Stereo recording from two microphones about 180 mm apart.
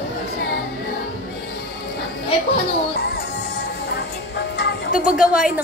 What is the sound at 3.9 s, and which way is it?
Music, 70° left (ahead or behind).